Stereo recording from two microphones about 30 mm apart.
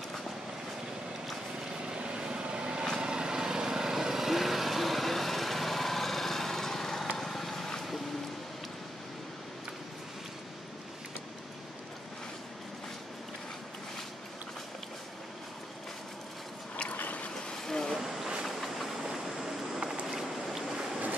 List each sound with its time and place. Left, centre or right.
1.6 s vehicle: right; by 7.9 s centre
17.6 s vehicle: centre
17.9 s boat: centre
18.4 s vehicle: centre